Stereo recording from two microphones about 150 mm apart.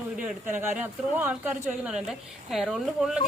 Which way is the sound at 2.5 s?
Centre (ahead or behind).